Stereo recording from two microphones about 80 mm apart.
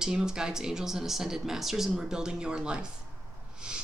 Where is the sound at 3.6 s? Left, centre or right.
Centre.